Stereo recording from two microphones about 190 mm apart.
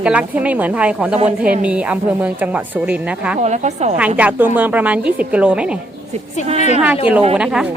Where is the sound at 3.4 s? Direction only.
35° right (ahead or behind).